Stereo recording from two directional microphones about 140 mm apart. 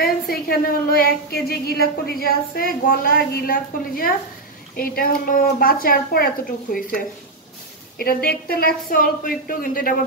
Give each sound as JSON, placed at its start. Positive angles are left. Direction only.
{"t": 0.0, "sound": "a woman's voice", "side_deg": 90}
{"t": 8.0, "sound": "a woman's voice", "side_deg": 90}